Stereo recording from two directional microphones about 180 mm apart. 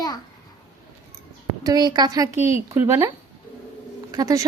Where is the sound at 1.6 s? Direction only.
20° right (ahead or behind).